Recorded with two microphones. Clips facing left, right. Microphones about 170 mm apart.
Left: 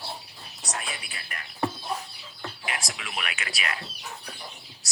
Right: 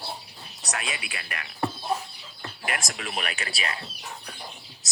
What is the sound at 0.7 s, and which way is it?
Speech, 90° right.